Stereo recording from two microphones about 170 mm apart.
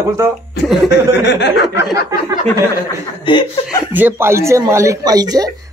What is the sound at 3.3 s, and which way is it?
Speech, 30° left (ahead or behind).